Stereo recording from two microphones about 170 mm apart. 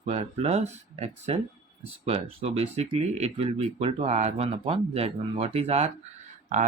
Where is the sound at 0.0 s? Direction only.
40° right (ahead or behind).